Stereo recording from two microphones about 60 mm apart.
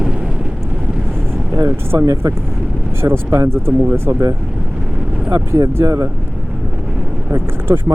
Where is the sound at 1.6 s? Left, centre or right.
Right.